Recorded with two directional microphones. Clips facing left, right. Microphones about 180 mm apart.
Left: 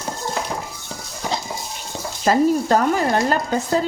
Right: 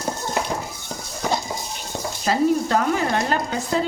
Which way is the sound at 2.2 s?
40° left (ahead or behind).